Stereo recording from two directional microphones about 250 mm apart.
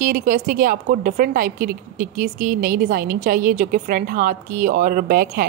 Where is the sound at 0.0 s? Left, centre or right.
Right.